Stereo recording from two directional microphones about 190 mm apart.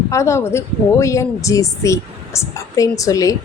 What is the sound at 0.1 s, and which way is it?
Speech, 15° left (ahead or behind).